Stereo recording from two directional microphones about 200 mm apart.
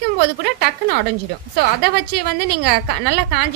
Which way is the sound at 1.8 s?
55° right (ahead or behind).